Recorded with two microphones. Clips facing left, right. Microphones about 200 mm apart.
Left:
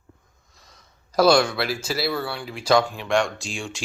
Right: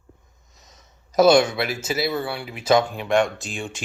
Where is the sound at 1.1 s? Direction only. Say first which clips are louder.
Right 2 dB; 20° right (ahead or behind).